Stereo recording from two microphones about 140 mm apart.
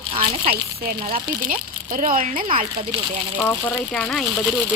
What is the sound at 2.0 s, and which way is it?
Speech, 75° right (ahead or behind).